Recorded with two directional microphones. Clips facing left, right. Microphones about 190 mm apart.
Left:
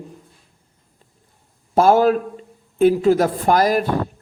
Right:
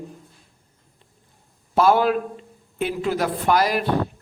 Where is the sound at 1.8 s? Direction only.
45° left (ahead or behind).